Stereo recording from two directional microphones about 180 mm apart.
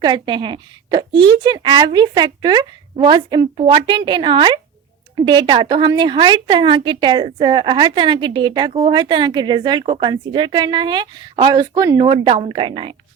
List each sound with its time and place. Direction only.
0.0 s a woman's voice: 25° right (ahead or behind)